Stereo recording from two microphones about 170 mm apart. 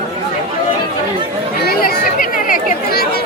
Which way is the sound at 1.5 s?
65° left (ahead or behind).